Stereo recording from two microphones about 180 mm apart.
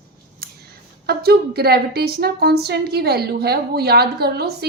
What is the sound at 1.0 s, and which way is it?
Speech, 60° right (ahead or behind).